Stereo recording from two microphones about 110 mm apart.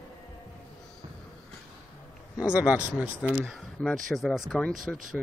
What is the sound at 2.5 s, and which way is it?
Speech, 10° right (ahead or behind).